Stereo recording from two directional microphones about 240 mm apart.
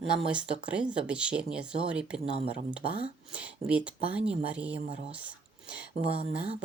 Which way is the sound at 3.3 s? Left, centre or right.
Centre.